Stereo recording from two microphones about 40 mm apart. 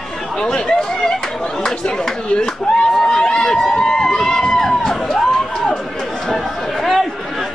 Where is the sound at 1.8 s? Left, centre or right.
Centre.